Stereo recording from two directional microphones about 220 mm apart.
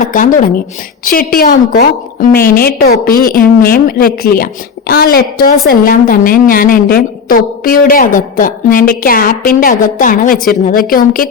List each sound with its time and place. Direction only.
0.1 s a woman's voice: 35° left (ahead or behind)